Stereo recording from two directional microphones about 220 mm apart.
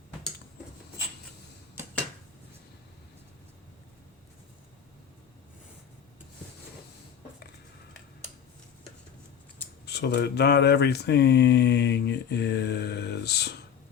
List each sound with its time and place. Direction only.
9.8 s speech: 50° left (ahead or behind)